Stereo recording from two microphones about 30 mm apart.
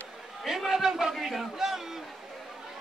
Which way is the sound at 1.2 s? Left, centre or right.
Centre.